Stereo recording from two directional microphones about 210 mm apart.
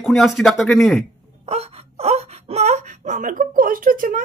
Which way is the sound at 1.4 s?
30° right (ahead or behind).